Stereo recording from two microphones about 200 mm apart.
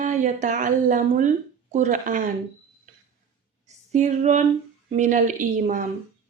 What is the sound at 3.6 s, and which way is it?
Speech, 35° right (ahead or behind).